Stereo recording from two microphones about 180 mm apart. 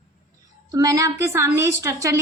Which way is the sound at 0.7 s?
20° right (ahead or behind).